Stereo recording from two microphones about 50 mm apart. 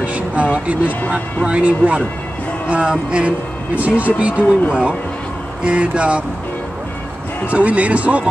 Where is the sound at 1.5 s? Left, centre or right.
Right.